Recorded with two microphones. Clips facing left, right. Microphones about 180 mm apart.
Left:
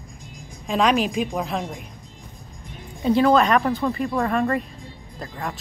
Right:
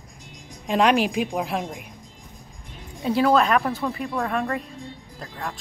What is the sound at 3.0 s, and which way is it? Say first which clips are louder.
A woman's voice: left 2 dB; 5° right (ahead or behind).